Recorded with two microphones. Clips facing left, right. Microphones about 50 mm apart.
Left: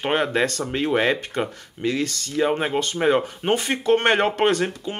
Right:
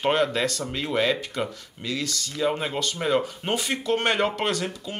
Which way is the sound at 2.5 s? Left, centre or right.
Left.